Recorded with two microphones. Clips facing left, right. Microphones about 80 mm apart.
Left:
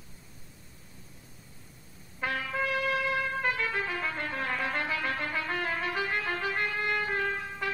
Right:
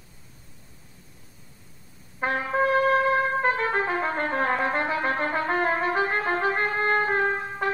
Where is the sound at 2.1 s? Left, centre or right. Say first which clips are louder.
Right 7 dB; right.